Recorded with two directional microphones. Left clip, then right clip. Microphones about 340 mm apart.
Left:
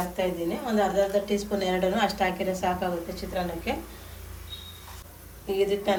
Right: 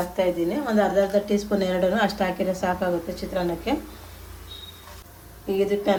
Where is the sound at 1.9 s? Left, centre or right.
Right.